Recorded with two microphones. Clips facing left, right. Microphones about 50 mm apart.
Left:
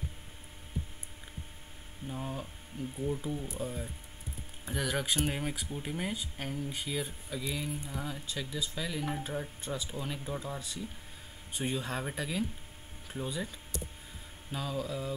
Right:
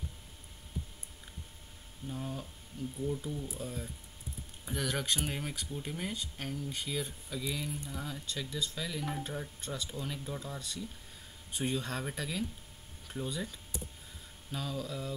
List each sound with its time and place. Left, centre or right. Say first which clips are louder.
2.0 s speech: left 1 dB; centre